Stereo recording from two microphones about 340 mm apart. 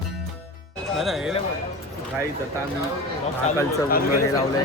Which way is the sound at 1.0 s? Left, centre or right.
Centre.